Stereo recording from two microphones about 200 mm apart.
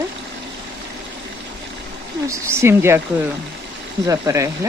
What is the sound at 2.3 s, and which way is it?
Speech, 10° right (ahead or behind).